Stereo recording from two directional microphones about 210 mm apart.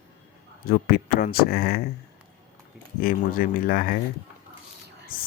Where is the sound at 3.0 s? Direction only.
40° left (ahead or behind).